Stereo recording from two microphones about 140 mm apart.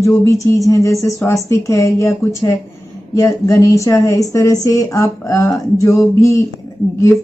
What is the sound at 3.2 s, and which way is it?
Speech, 20° left (ahead or behind).